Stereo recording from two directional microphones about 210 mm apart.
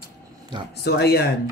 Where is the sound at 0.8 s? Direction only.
50° left (ahead or behind).